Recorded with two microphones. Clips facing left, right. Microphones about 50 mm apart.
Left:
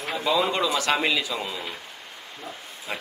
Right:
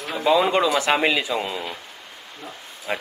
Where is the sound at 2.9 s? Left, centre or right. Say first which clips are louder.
Right 6 dB; centre.